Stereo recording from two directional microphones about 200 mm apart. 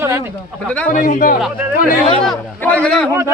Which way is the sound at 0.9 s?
40° left (ahead or behind).